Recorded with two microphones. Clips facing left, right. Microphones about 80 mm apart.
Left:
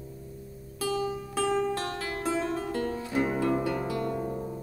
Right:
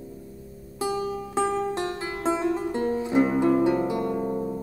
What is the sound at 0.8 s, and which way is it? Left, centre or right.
Music, right.